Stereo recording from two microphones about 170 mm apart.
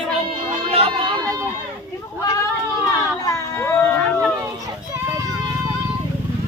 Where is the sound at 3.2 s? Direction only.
15° left (ahead or behind).